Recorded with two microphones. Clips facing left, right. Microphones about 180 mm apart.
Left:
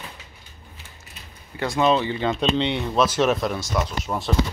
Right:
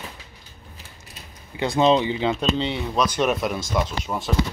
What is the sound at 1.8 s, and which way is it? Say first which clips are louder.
Speech: right 2 dB; 25° right (ahead or behind).